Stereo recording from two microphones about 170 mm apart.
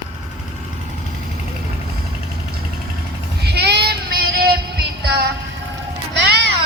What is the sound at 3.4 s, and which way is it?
Child singing, 70° right (ahead or behind).